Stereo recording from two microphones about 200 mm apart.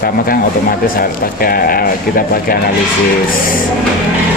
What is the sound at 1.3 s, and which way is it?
A man's voice, 45° left (ahead or behind).